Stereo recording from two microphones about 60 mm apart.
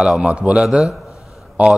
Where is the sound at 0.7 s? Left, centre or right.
Centre.